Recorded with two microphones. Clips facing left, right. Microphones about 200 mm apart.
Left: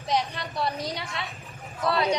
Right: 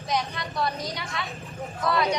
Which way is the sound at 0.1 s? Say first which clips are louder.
Left 1 dB; 30° left (ahead or behind).